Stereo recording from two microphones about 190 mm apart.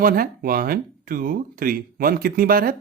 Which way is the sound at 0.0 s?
50° right (ahead or behind).